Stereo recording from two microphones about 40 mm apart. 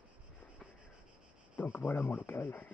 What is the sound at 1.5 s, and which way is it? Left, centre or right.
Speech, left.